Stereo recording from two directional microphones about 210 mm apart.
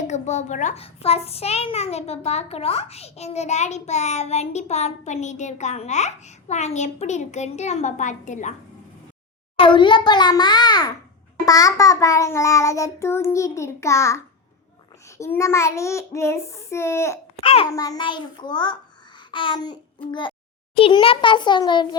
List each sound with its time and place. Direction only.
0.1 s a child's voice: 35° left (ahead or behind)
9.6 s a child's voice: 25° left (ahead or behind)
11.4 s child singing: 15° left (ahead or behind)
15.2 s child singing: 15° left (ahead or behind)
17.4 s a child's voice: 25° left (ahead or behind)
19.3 s babbling: 25° left (ahead or behind)
20.1 s a child's voice: 25° left (ahead or behind)